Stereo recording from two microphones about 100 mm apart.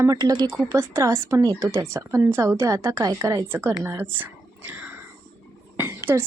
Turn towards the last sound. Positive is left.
turn(degrees=-25)  # may be behind; listen again after turning